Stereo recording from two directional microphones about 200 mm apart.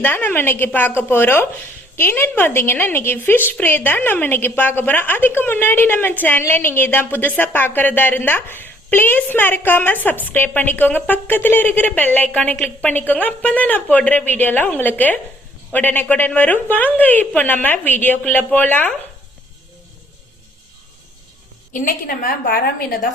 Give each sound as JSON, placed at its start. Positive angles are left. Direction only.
{"t": 0.0, "sound": "a woman's voice", "side_deg": 10}
{"t": 21.7, "sound": "a woman's voice", "side_deg": 45}